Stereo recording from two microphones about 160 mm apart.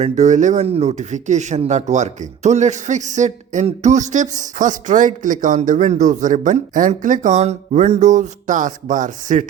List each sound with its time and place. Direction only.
0.0 s speech: 45° right (ahead or behind)